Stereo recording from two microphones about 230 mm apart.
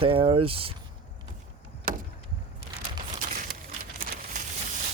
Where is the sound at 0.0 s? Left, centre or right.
Right.